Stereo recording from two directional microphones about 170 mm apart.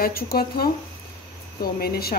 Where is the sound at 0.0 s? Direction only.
60° left (ahead or behind).